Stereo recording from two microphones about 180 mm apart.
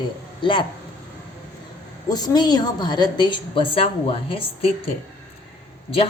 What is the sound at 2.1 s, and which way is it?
A woman's voice, 20° left (ahead or behind).